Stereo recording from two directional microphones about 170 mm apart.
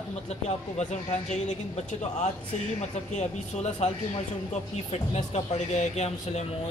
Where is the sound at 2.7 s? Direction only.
40° left (ahead or behind).